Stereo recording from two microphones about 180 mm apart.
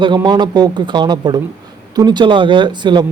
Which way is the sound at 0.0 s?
25° right (ahead or behind).